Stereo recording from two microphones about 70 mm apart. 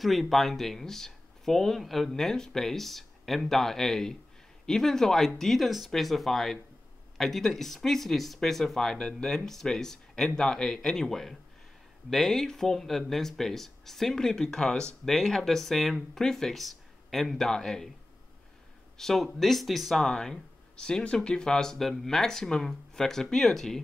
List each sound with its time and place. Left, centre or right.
0.0 s speech: centre
18.9 s speech: centre